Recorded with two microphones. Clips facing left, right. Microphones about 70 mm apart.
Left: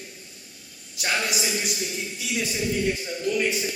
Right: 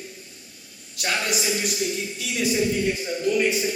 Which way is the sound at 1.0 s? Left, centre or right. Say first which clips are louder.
Right 1 dB; centre.